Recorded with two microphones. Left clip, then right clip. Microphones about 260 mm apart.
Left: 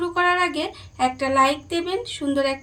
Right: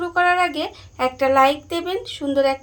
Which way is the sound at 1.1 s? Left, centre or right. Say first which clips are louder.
Right 5 dB; centre.